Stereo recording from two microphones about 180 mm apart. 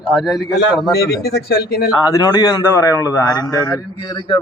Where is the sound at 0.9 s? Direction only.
60° left (ahead or behind).